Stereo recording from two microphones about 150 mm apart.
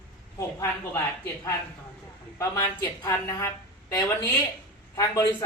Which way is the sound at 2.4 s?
20° left (ahead or behind).